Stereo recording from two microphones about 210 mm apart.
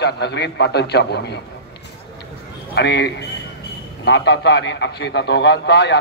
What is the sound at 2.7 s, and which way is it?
A man's voice, 55° left (ahead or behind).